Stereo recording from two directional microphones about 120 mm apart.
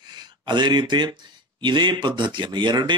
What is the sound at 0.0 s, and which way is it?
Speech, 40° right (ahead or behind).